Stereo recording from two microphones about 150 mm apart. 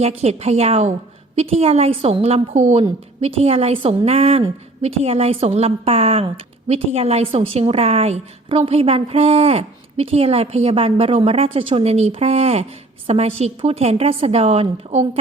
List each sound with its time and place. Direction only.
0.0 s a woman's voice: 45° right (ahead or behind)